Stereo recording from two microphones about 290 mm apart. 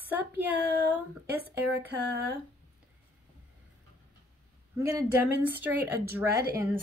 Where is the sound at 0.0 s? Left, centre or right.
Centre.